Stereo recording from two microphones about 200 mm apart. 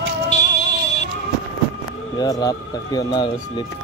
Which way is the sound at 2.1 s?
20° left (ahead or behind).